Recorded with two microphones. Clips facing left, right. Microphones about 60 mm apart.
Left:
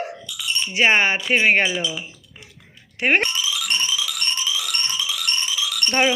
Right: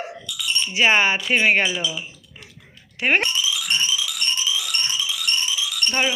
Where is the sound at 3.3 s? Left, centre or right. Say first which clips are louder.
Right 1 dB; left.